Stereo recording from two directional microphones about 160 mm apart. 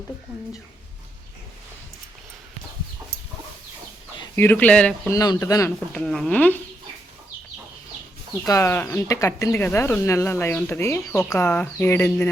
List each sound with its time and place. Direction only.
4.4 s speech: 10° left (ahead or behind)
5.1 s speech: 20° left (ahead or behind)
5.9 s speech: centre (ahead or behind)
8.4 s speech: 15° left (ahead or behind)